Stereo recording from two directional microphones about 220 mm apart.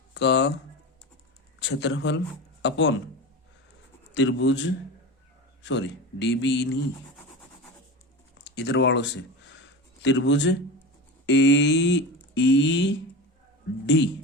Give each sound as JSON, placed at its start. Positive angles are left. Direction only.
{"t": 0.1, "sound": "speech", "side_deg": 50}
{"t": 1.5, "sound": "speech", "side_deg": 55}
{"t": 4.1, "sound": "a man's voice", "side_deg": 55}
{"t": 8.4, "sound": "a sound", "side_deg": 50}
{"t": 11.3, "sound": "a man's voice", "side_deg": 55}